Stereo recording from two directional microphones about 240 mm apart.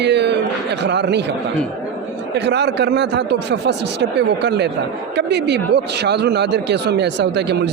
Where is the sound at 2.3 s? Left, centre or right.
Right.